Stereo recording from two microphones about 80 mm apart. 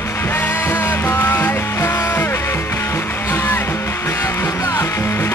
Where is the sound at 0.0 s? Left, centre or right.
Left.